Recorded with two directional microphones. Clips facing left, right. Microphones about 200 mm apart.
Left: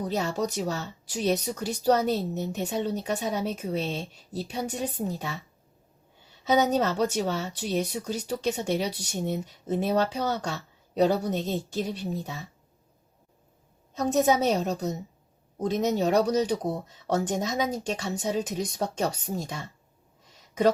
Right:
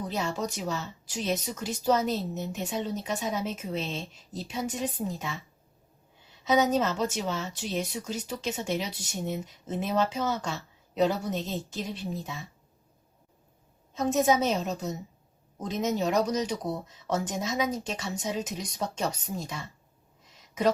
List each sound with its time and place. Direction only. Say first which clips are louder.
0.0 s a woman's voice: left 3 dB; 40° left (ahead or behind)
6.5 s a woman's voice: left 1 dB; 40° left (ahead or behind)
14.2 s a woman's voice: left 2 dB; 35° left (ahead or behind)